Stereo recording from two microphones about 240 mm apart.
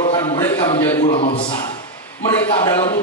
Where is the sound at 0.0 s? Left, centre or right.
Left.